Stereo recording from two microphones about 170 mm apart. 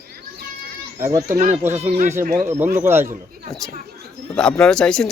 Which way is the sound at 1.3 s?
55° right (ahead or behind).